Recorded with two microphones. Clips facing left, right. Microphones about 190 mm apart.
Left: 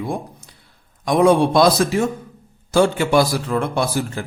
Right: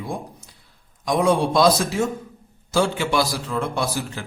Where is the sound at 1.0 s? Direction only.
60° left (ahead or behind).